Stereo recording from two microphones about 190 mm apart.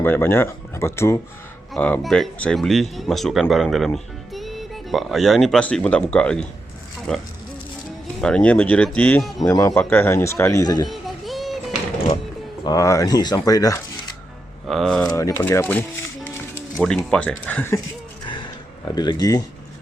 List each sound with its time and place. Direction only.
0.0 s speech: 10° left (ahead or behind)
10.8 s music: centre (ahead or behind)
12.6 s speech: 15° left (ahead or behind)
14.7 s speech: centre (ahead or behind)
15.0 s music: 15° left (ahead or behind)
17.1 s speech: 5° left (ahead or behind)
18.9 s speech: 20° left (ahead or behind)